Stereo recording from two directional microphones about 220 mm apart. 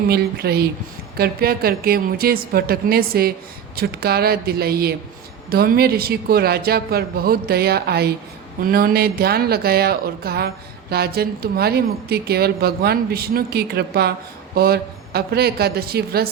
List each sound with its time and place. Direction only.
0.1 s speech: 45° right (ahead or behind)